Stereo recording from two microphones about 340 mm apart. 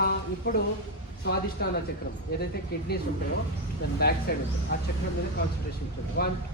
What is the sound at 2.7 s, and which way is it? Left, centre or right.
Speech, left.